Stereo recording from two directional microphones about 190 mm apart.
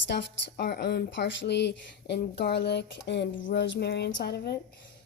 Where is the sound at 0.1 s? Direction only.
65° left (ahead or behind).